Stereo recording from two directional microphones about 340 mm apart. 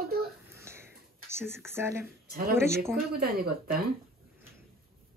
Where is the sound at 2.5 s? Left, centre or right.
Centre.